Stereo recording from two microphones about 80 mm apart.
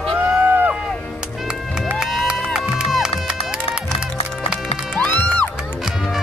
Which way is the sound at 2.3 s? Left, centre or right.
Centre.